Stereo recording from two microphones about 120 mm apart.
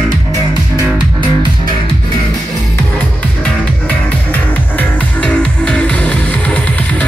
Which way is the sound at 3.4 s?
15° left (ahead or behind).